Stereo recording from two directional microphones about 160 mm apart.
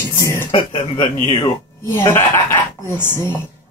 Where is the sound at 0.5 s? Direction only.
35° left (ahead or behind).